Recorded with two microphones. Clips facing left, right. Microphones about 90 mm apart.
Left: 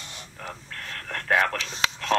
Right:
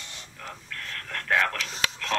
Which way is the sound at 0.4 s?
25° left (ahead or behind).